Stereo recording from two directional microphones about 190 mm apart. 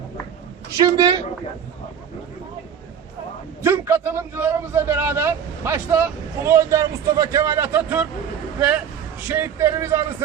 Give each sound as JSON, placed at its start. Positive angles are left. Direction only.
{"t": 0.8, "sound": "speech", "side_deg": -20}
{"t": 3.6, "sound": "a man's voice", "side_deg": -10}
{"t": 9.2, "sound": "a man's voice", "side_deg": -15}